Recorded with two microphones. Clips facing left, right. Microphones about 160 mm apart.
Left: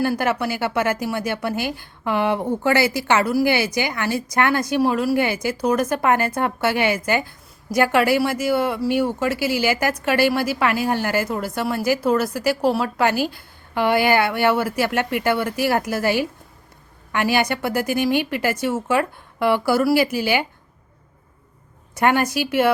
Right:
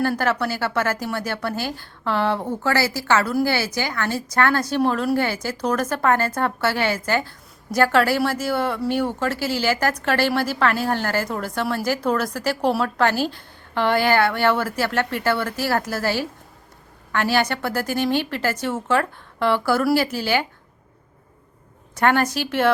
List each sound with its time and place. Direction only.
0.2 s speech: 15° left (ahead or behind)
21.9 s speech: 10° left (ahead or behind)